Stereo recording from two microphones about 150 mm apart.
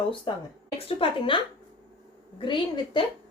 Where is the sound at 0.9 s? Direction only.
35° left (ahead or behind).